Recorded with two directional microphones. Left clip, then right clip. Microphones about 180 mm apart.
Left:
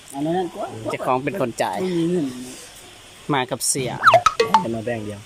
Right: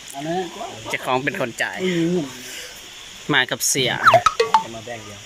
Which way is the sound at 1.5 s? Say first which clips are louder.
Left 2 dB; 20° left (ahead or behind).